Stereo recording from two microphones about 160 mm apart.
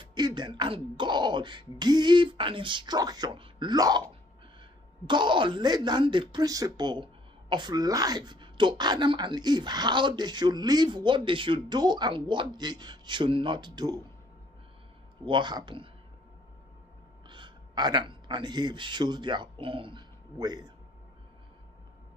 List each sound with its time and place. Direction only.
0.0 s speech: 30° right (ahead or behind)
5.0 s speech: 30° right (ahead or behind)
15.2 s speech: 30° right (ahead or behind)
17.3 s speech: 30° right (ahead or behind)